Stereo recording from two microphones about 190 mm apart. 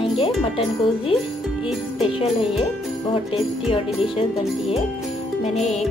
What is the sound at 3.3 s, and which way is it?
Music, 30° left (ahead or behind).